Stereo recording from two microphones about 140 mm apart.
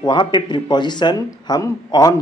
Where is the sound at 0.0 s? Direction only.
35° left (ahead or behind).